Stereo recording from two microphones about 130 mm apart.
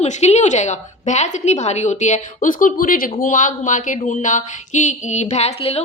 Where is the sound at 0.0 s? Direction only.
55° left (ahead or behind).